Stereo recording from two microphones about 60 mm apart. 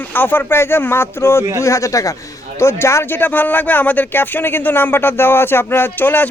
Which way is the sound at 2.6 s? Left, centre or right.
Left.